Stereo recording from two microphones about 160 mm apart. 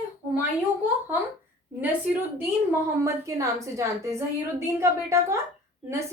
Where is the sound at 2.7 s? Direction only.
20° right (ahead or behind).